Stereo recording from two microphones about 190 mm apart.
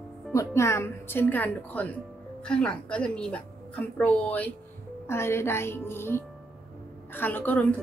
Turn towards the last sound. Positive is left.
turn(degrees=10)  # may be behind; listen again after turning